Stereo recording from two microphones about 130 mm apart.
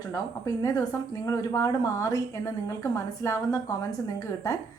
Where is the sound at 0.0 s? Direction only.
30° left (ahead or behind).